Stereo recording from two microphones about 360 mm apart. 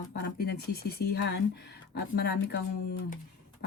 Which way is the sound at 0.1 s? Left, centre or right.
Left.